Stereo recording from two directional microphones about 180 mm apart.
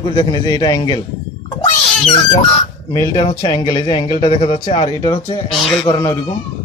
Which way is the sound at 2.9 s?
25° left (ahead or behind).